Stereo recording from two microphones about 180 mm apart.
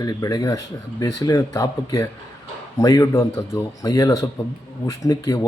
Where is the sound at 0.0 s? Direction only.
20° left (ahead or behind).